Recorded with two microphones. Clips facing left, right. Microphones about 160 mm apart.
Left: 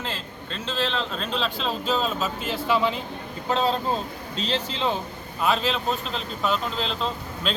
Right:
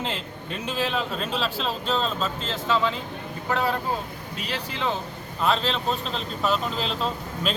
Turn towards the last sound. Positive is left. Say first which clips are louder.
# right 1 dB
turn(degrees=-5)  # may be behind; listen again after turning